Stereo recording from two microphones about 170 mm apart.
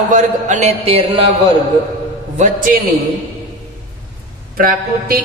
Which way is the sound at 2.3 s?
50° right (ahead or behind).